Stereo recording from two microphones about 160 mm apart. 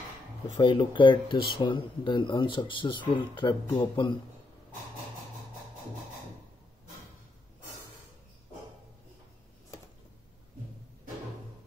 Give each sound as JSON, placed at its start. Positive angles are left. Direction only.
{"t": 0.6, "sound": "speech", "side_deg": 30}